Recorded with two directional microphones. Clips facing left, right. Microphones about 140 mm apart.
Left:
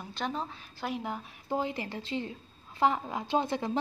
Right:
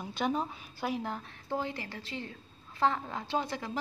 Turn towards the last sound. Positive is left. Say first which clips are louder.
# left 4 dB
turn(degrees=20)  # may be behind; listen again after turning